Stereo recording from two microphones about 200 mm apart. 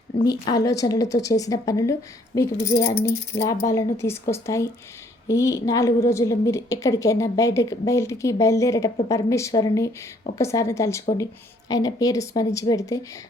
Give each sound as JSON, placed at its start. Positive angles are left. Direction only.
{"t": 0.3, "sound": "a woman's voice", "side_deg": 20}